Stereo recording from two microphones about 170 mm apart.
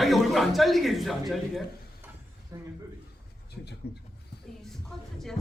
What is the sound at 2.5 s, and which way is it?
Speech, 20° right (ahead or behind).